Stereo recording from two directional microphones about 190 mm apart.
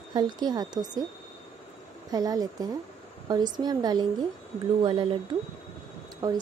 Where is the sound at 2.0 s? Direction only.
20° right (ahead or behind).